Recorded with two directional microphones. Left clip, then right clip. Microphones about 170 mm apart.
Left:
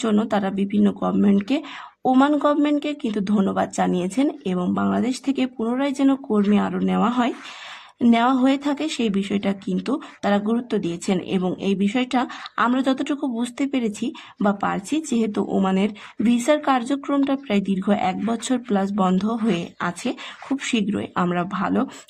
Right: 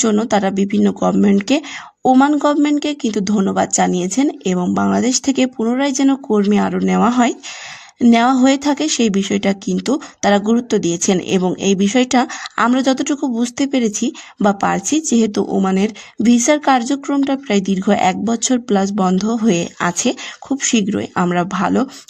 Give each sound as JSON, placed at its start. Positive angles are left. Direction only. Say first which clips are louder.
{"t": 0.0, "sound": "speech", "louder": "right 7 dB", "side_deg": -35}
{"t": 2.0, "sound": "speech", "louder": "right 5 dB", "side_deg": -30}
{"t": 6.5, "sound": "speech", "louder": "right 6 dB", "side_deg": -40}
{"t": 16.8, "sound": "speech", "louder": "right 4 dB", "side_deg": -25}
{"t": 18.3, "sound": "speech", "louder": "right 7 dB", "side_deg": -30}